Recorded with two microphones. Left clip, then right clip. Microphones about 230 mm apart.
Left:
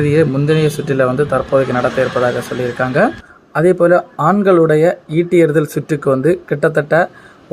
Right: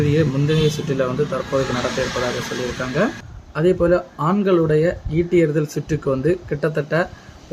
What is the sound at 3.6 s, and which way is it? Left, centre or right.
Speech, centre.